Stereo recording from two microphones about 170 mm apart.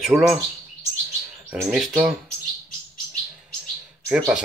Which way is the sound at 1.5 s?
Centre (ahead or behind).